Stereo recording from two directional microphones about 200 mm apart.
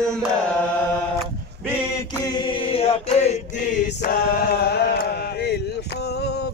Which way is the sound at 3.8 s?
55° left (ahead or behind).